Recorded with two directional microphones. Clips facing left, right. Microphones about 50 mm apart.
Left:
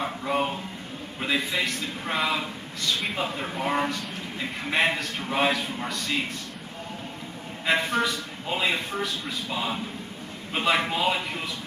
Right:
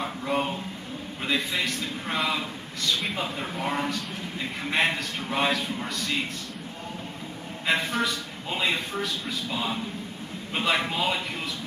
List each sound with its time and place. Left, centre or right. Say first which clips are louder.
0.0 s a man's voice: left 1 dB; centre
7.6 s a man's voice: left 2 dB; centre